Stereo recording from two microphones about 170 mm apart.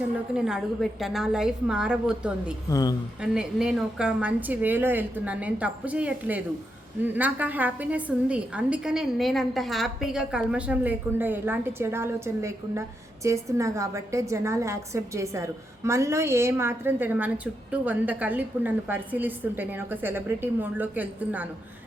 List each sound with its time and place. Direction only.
0.3 s a woman's voice: 5° right (ahead or behind)
2.6 s speech: 20° left (ahead or behind)
3.2 s a woman's voice: 5° right (ahead or behind)